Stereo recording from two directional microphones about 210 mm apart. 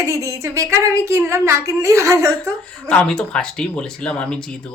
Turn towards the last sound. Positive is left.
turn(degrees=5)  # may be behind; listen again after turning